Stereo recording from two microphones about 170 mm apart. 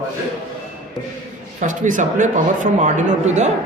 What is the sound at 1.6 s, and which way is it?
Speech, 50° right (ahead or behind).